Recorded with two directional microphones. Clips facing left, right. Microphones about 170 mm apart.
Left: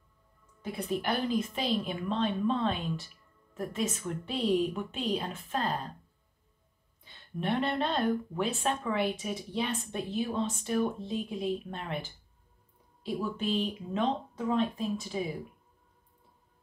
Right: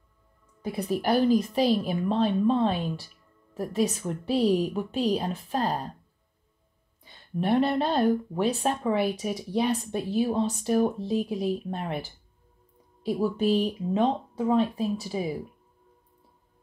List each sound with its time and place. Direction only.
0.6 s speech: 40° right (ahead or behind)
7.3 s speech: 40° right (ahead or behind)